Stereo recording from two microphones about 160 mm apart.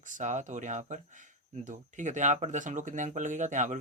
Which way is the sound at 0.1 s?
50° right (ahead or behind).